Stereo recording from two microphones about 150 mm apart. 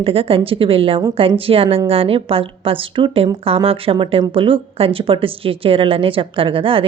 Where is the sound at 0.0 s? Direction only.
40° right (ahead or behind).